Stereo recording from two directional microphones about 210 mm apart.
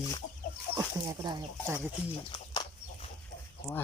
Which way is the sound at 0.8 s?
20° right (ahead or behind).